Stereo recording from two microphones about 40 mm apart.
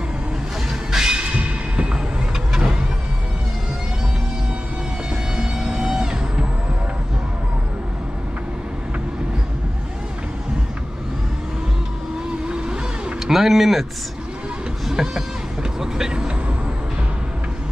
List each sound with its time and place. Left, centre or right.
0.7 s music: centre
1.1 s music: right
5.1 s music: centre
12.4 s vehicle: right
13.3 s speech: centre
14.9 s speech: centre
15.8 s vehicle: centre